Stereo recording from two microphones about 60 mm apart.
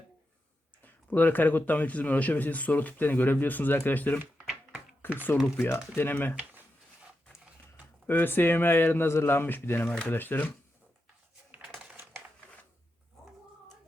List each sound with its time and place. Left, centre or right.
0.8 s a man's voice: left
8.0 s speech: left